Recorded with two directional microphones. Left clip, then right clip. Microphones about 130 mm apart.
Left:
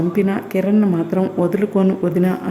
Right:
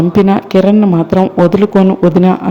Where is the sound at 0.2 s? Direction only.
35° right (ahead or behind).